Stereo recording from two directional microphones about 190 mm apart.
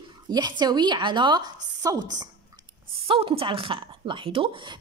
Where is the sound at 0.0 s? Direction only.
20° right (ahead or behind).